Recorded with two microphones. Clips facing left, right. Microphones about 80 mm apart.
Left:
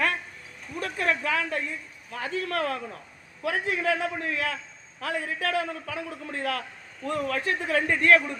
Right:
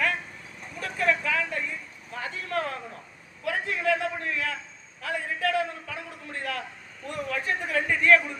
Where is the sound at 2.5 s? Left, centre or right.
Left.